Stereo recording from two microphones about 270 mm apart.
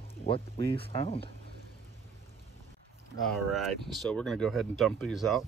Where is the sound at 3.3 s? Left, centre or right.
Centre.